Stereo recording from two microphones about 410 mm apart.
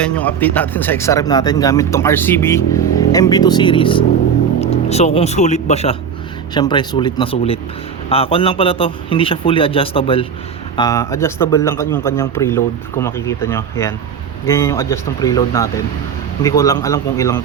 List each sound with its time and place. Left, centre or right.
0.0 s a man's voice: centre